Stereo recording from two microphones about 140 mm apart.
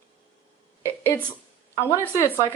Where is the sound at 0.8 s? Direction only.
15° left (ahead or behind).